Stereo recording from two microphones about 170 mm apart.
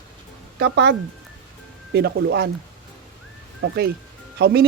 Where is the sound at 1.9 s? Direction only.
70° right (ahead or behind).